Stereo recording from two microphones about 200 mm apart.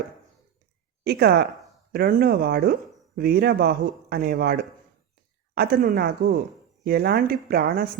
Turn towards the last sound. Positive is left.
turn(degrees=-50)  # may be behind; listen again after turning